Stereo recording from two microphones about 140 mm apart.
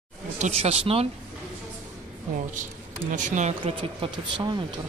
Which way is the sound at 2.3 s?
65° right (ahead or behind).